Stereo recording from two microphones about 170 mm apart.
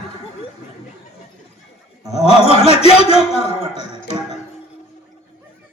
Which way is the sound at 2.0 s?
40° left (ahead or behind).